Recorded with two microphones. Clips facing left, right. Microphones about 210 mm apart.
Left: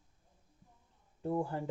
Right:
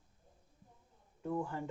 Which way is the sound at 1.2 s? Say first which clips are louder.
Left 3 dB; 30° left (ahead or behind).